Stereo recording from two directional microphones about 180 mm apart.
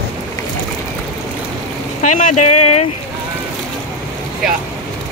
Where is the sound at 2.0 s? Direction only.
45° left (ahead or behind).